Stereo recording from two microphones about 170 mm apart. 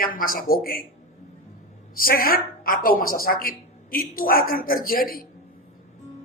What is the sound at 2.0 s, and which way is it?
A man's voice, 60° left (ahead or behind).